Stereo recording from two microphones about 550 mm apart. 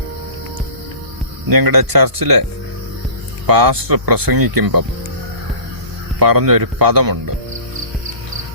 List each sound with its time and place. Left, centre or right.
1.5 s speech: right
3.4 s speech: right
6.1 s speech: right